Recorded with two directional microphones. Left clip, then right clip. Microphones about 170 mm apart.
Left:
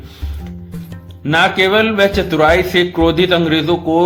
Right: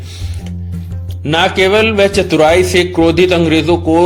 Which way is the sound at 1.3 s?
45° right (ahead or behind).